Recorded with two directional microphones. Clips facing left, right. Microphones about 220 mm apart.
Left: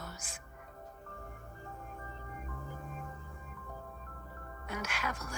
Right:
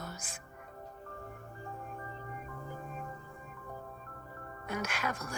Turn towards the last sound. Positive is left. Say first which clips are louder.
# right 3 dB
turn(degrees=-50)  # may be behind; listen again after turning